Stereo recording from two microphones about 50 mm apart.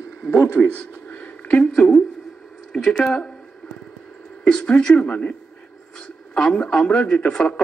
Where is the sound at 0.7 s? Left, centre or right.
Left.